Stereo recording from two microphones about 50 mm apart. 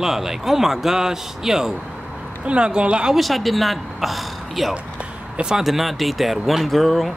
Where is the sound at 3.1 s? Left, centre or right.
Centre.